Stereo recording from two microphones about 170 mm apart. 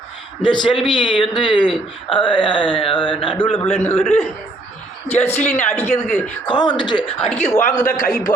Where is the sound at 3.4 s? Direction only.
10° left (ahead or behind).